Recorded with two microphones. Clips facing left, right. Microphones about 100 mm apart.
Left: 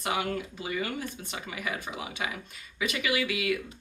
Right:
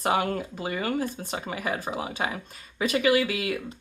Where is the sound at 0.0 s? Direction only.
40° right (ahead or behind).